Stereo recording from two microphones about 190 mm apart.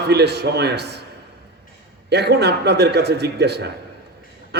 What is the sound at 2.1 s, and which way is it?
A man's voice, 60° right (ahead or behind).